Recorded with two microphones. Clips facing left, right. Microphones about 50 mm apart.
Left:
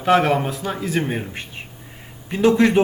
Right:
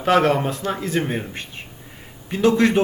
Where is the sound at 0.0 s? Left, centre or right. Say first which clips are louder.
Even; centre.